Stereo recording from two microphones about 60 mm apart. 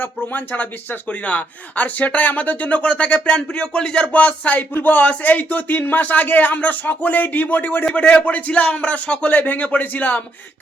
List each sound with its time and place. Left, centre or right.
0.0 s speech: left